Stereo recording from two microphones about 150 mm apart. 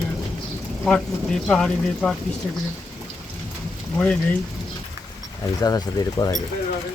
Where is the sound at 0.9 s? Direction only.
5° left (ahead or behind).